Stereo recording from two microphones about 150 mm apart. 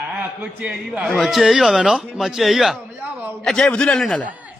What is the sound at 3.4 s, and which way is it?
Speech, 5° left (ahead or behind).